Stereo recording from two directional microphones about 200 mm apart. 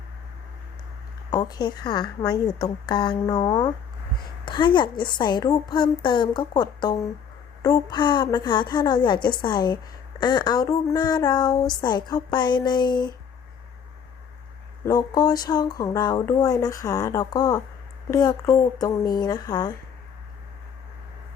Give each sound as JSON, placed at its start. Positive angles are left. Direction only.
{"t": 1.3, "sound": "speech", "side_deg": 20}
{"t": 14.8, "sound": "speech", "side_deg": 20}